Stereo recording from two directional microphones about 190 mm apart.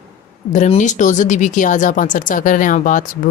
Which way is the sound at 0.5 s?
40° left (ahead or behind).